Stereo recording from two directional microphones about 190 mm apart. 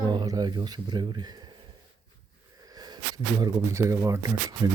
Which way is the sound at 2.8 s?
20° right (ahead or behind).